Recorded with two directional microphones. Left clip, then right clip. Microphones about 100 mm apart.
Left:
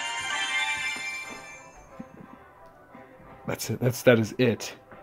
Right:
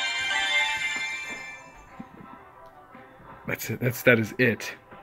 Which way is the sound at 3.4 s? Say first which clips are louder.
Even; 25° left (ahead or behind).